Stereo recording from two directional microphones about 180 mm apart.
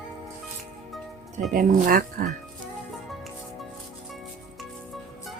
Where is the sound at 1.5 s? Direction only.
50° right (ahead or behind).